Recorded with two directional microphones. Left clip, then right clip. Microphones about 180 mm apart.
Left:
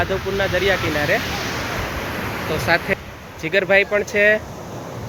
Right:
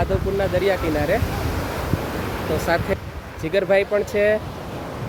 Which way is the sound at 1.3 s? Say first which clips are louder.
Left 3 dB; 60° right (ahead or behind).